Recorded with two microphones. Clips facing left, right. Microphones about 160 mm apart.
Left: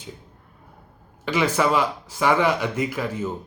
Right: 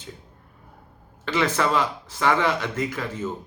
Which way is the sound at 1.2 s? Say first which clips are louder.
Left 2 dB; 10° left (ahead or behind).